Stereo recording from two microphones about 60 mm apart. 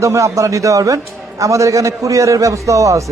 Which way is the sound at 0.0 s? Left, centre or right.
Right.